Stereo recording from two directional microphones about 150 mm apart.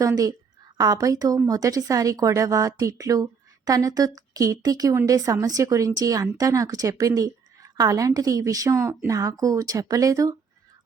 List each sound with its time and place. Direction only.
0.0 s a woman's voice: 25° right (ahead or behind)